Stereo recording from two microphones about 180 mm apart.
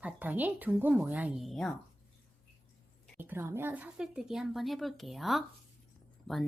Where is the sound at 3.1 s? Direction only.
10° right (ahead or behind).